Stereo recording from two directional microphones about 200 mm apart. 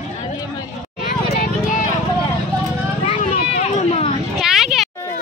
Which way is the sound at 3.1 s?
30° left (ahead or behind).